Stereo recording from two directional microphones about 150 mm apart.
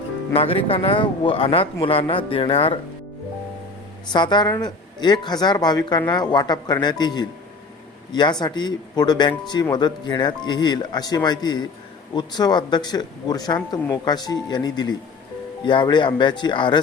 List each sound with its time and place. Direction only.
0.3 s speech: 40° left (ahead or behind)
4.1 s speech: 30° left (ahead or behind)